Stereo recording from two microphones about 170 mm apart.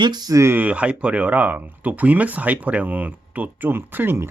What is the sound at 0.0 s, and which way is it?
Speech, 25° right (ahead or behind).